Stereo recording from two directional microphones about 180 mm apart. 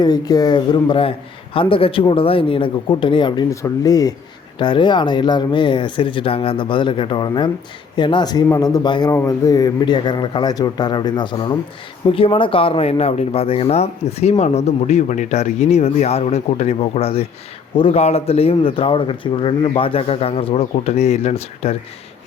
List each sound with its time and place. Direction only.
0.0 s speech: 20° left (ahead or behind)